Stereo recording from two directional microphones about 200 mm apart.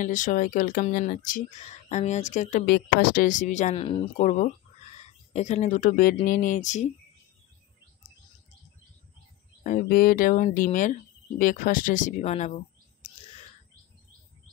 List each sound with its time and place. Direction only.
0.0 s speech: 40° left (ahead or behind)
9.6 s speech: 40° left (ahead or behind)